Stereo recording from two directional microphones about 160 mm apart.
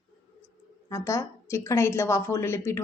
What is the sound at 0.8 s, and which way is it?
A woman's voice, 20° left (ahead or behind).